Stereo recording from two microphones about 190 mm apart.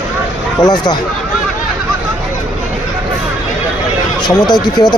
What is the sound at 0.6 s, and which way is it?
Speech, 20° left (ahead or behind).